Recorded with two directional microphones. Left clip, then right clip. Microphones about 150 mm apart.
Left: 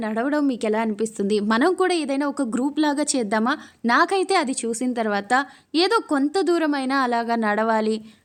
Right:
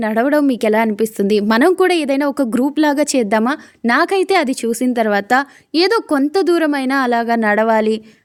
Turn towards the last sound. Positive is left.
turn(degrees=-40)  # may be behind; listen again after turning